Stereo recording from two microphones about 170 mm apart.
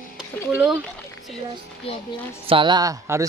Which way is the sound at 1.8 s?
35° left (ahead or behind).